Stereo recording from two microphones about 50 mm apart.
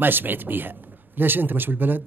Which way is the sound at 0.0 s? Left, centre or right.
Right.